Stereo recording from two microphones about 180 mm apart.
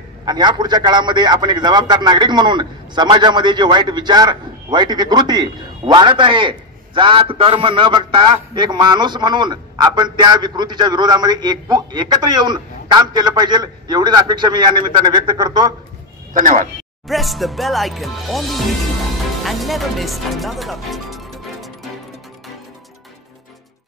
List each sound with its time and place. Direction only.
0.2 s a man's voice: 25° right (ahead or behind)
16.3 s speech: 45° right (ahead or behind)
17.1 s speech: centre (ahead or behind)